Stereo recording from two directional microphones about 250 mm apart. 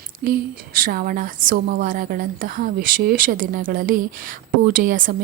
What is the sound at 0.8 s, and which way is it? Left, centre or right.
Speech, right.